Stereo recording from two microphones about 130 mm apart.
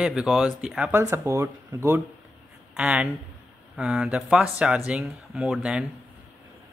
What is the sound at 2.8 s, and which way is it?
Speech, 5° right (ahead or behind).